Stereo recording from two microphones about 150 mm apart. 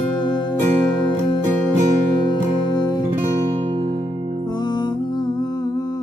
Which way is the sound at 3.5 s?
35° right (ahead or behind).